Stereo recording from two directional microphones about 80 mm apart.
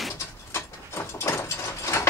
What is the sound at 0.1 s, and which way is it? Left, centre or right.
Ratchet, left.